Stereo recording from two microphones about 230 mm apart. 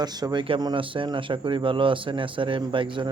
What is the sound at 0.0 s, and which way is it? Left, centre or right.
Speech, centre.